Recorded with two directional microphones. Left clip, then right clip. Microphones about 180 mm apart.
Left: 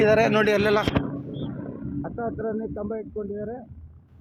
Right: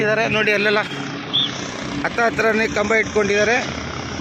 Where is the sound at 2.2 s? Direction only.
30° right (ahead or behind).